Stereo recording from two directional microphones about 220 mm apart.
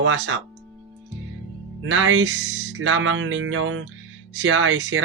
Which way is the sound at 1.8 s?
65° right (ahead or behind).